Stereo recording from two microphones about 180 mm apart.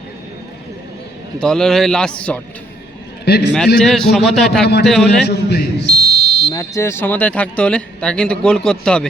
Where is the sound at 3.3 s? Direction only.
65° left (ahead or behind).